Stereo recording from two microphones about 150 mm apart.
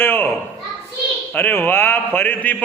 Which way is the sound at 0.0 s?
15° left (ahead or behind).